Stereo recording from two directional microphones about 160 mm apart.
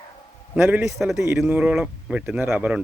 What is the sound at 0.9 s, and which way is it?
Speech, centre (ahead or behind).